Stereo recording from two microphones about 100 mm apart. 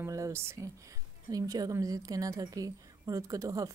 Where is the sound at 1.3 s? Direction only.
35° right (ahead or behind).